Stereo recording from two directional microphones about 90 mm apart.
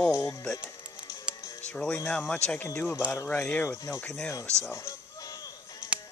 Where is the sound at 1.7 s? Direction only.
10° left (ahead or behind).